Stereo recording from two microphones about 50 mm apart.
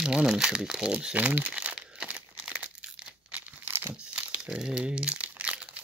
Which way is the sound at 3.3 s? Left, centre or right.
Right.